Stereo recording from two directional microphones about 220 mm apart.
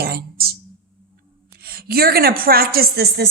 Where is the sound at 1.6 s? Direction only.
45° right (ahead or behind).